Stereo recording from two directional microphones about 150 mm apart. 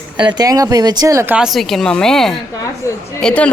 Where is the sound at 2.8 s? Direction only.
20° left (ahead or behind).